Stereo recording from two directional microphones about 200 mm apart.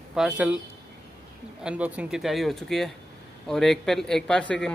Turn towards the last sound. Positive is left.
turn(degrees=5)  # may be behind; listen again after turning